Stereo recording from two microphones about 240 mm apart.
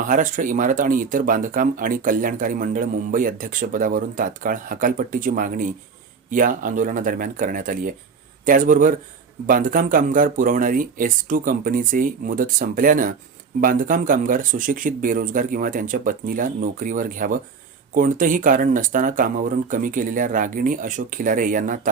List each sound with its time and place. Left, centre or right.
0.0 s speech: right